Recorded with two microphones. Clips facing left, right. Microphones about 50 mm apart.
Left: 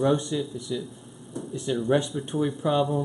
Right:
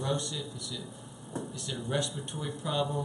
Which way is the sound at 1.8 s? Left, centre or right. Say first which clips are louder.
Left 7 dB; centre.